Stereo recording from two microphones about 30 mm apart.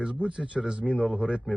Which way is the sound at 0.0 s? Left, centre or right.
Right.